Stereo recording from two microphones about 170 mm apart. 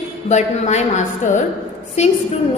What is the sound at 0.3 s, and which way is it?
A woman's voice, 40° left (ahead or behind).